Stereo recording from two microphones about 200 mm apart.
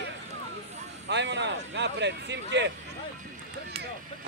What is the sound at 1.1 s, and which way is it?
Speech, 60° right (ahead or behind).